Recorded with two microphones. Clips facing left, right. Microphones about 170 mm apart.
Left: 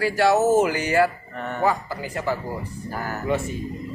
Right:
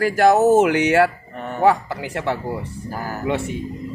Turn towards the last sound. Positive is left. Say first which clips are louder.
# right 1 dB
turn(degrees=-75)  # may be behind; listen again after turning